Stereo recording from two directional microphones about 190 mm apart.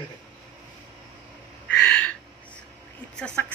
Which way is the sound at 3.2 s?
5° left (ahead or behind).